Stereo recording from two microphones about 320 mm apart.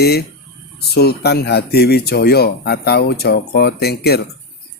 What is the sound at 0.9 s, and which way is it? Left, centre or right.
Speech, left.